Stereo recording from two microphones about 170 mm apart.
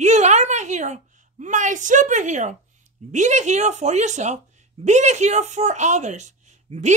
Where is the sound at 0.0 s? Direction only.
45° right (ahead or behind).